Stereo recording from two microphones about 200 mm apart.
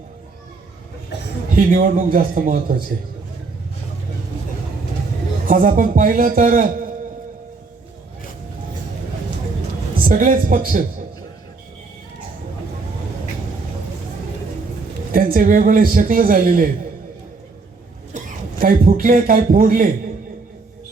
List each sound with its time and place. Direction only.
1.5 s a man's voice: 45° right (ahead or behind)
5.5 s a man's voice: 40° right (ahead or behind)
10.0 s a man's voice: 45° right (ahead or behind)
15.1 s a man's voice: 45° right (ahead or behind)
18.1 s a man's voice: 40° right (ahead or behind)